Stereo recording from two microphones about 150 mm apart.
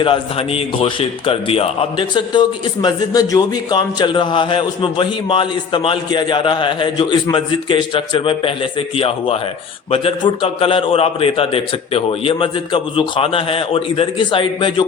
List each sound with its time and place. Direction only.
0.0 s a man's voice: 40° left (ahead or behind)